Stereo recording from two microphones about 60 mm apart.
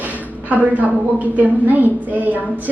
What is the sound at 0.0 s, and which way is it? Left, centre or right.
A woman's voice, right.